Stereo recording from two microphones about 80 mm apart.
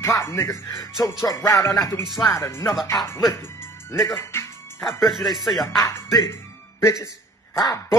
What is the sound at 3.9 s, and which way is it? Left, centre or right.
Speech, left.